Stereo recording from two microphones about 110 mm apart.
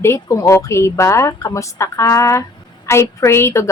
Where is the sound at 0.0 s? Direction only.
25° left (ahead or behind).